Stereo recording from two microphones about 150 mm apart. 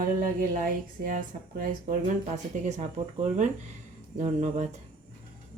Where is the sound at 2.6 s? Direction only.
50° right (ahead or behind).